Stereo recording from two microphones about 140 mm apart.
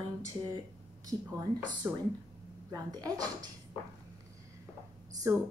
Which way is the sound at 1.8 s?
15° right (ahead or behind).